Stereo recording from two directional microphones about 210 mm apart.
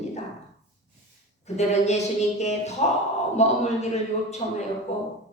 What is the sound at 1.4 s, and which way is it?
A woman's voice, 30° left (ahead or behind).